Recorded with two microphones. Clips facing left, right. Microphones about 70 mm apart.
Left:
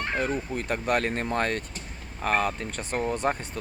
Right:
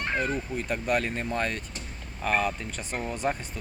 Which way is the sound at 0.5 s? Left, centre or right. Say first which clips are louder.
Left 1 dB; left.